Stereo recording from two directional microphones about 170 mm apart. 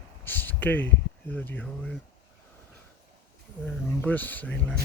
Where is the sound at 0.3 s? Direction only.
10° left (ahead or behind).